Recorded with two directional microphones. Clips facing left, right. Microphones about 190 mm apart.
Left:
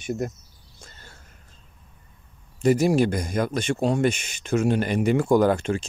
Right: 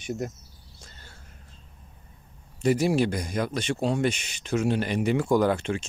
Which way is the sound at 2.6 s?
45° left (ahead or behind).